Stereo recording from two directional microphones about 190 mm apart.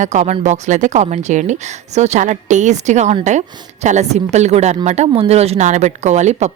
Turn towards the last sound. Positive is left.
turn(degrees=-35)  # may be behind; listen again after turning